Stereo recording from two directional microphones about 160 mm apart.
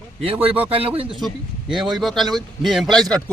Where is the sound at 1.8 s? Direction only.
Centre (ahead or behind).